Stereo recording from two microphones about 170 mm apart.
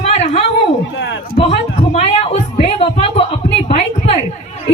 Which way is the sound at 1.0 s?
90° left.